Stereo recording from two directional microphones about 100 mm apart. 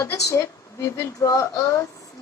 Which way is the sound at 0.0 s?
30° left (ahead or behind).